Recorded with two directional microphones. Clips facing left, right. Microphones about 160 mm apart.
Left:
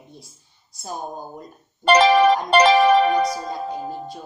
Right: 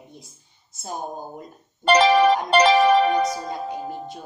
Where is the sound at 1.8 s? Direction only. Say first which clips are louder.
Left 1 dB; 55° left (ahead or behind).